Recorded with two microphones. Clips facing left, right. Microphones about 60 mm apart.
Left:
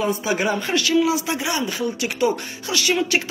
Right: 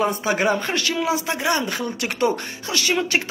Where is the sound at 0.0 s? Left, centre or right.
Right.